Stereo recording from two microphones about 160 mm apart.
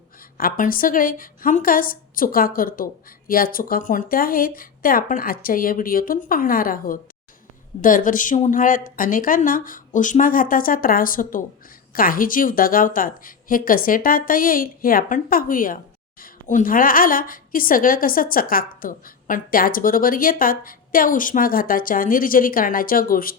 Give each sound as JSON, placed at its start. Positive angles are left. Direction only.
{"t": 0.3, "sound": "a woman's voice", "side_deg": 60}